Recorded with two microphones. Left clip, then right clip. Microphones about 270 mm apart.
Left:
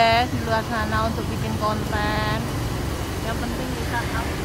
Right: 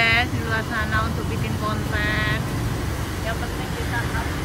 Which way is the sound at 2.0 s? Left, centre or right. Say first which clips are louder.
Right 2 dB; centre.